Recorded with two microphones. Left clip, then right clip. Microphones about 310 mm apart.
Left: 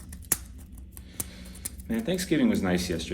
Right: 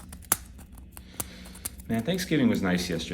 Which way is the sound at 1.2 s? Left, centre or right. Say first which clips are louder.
Right 1 dB; centre.